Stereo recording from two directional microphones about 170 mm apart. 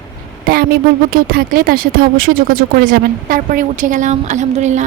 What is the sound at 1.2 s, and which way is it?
Speech, 60° right (ahead or behind).